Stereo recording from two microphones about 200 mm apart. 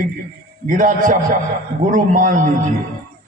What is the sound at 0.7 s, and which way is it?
A man's voice, 40° right (ahead or behind).